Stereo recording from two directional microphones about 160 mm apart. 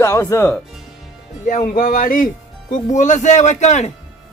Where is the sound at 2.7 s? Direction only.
50° left (ahead or behind).